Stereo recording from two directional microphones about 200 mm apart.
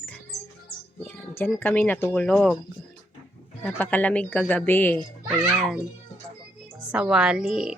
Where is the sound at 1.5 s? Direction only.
10° left (ahead or behind).